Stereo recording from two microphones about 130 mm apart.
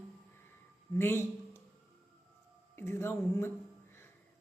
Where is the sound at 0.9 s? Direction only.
20° left (ahead or behind).